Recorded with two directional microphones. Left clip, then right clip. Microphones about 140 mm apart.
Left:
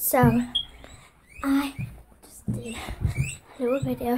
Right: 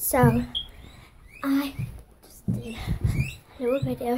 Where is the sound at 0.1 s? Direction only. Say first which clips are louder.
Even; 10° left (ahead or behind).